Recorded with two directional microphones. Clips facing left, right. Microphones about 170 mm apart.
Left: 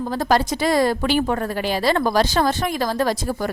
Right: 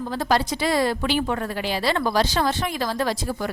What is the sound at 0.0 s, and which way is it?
A woman's voice, 45° left (ahead or behind).